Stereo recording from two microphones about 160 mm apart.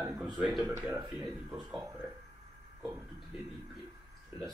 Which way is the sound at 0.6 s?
15° right (ahead or behind).